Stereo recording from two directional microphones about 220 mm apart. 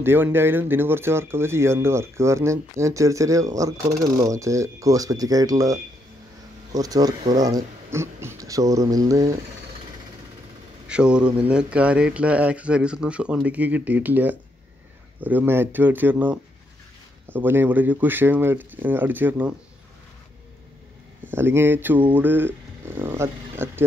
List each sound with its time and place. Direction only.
0.0 s speech: 10° right (ahead or behind)
10.9 s speech: 5° right (ahead or behind)
21.3 s speech: 10° right (ahead or behind)